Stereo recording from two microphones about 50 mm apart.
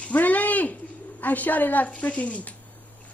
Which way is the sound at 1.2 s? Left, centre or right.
Left.